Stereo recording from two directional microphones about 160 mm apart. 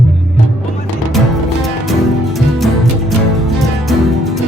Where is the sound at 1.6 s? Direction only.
Centre (ahead or behind).